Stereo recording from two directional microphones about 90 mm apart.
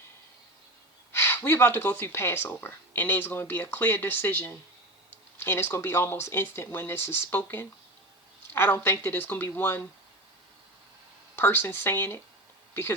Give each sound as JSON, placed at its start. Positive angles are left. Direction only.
{"t": 1.1, "sound": "speech", "side_deg": 25}
{"t": 11.3, "sound": "speech", "side_deg": 25}